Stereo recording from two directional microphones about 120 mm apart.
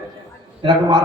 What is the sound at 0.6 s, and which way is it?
Speech, 35° right (ahead or behind).